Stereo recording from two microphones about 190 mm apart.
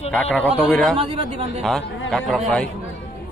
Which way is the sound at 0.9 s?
30° right (ahead or behind).